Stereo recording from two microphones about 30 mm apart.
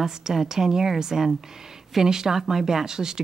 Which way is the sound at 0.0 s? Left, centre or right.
Centre.